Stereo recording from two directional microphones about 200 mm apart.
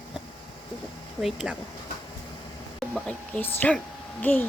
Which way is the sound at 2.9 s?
5° left (ahead or behind).